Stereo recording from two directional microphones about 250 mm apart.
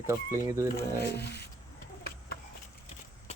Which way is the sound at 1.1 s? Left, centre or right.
Left.